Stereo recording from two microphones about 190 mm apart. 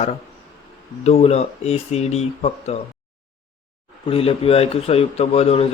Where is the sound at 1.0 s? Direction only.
35° left (ahead or behind).